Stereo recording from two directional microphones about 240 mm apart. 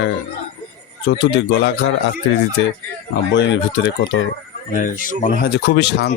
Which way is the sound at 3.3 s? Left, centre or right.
Left.